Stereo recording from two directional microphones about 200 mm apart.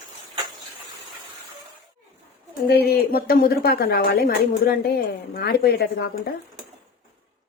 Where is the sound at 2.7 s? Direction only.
50° left (ahead or behind).